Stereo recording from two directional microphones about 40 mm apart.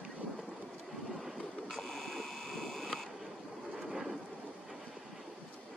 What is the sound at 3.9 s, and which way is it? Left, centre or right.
Thunder, centre.